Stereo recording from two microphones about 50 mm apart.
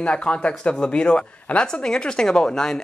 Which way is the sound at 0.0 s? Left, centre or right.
Left.